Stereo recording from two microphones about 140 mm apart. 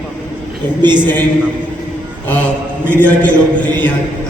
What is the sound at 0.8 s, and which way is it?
Speech, 30° right (ahead or behind).